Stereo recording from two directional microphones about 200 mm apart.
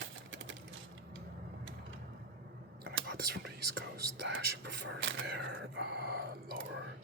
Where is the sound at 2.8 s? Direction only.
50° right (ahead or behind).